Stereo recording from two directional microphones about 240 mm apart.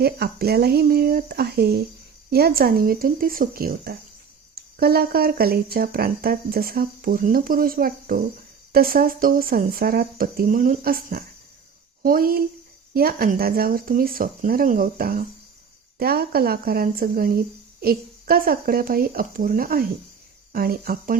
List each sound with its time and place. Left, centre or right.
0.0 s speech: right